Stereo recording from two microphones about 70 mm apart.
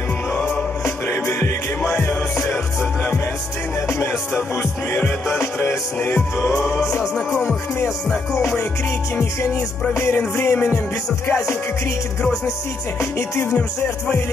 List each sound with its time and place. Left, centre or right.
0.8 s music: left
5.3 s music: left
7.0 s music: centre
9.9 s music: left
13.5 s music: centre